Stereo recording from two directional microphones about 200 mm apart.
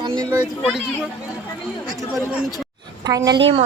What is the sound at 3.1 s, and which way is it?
Speech, 20° right (ahead or behind).